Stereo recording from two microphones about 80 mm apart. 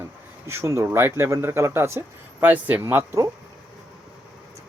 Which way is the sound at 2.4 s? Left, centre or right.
Right.